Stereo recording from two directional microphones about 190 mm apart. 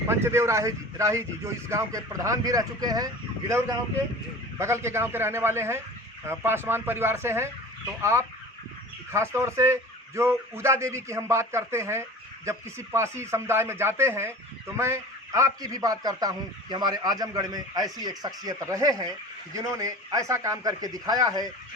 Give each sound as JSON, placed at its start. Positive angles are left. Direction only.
{"t": 0.1, "sound": "speech", "side_deg": -15}
{"t": 9.1, "sound": "a man's voice", "side_deg": -15}